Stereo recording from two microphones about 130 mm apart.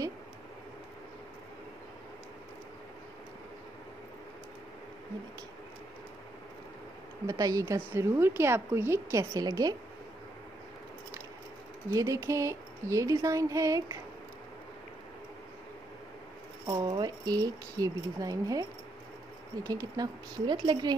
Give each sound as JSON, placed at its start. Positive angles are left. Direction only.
{"t": 7.2, "sound": "a woman's voice", "side_deg": -25}
{"t": 11.9, "sound": "a woman's voice", "side_deg": -25}
{"t": 16.6, "sound": "a woman's voice", "side_deg": -35}